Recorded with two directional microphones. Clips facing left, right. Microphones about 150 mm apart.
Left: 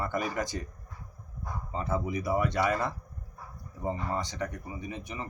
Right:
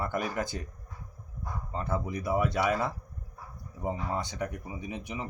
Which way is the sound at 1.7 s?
5° left (ahead or behind).